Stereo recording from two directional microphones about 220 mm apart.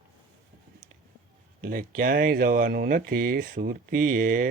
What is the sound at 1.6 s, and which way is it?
Speech, 40° right (ahead or behind).